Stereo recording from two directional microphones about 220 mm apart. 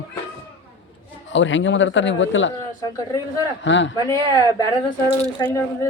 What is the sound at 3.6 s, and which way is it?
Speech, 55° left (ahead or behind).